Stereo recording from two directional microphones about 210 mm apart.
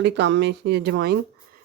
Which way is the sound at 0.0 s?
55° right (ahead or behind).